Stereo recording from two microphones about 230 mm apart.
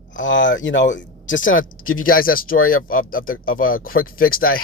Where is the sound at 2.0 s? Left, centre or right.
Left.